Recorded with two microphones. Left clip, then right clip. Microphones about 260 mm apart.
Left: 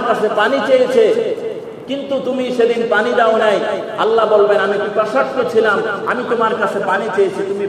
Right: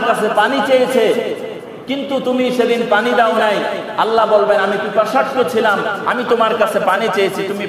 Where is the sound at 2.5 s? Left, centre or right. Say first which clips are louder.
Left 3 dB; right.